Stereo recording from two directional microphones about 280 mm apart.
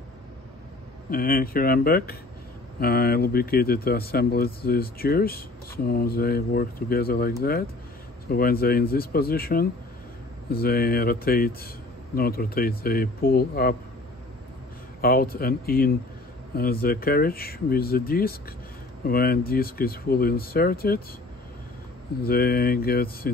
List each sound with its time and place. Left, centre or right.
1.1 s speech: left
15.0 s speech: left
22.2 s speech: left